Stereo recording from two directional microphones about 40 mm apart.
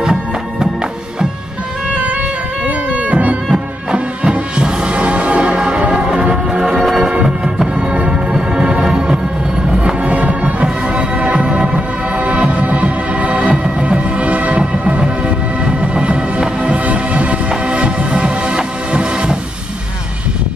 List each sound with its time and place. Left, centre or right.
0.0 s music: centre
2.6 s music: right
3.9 s music: right
10.0 s music: right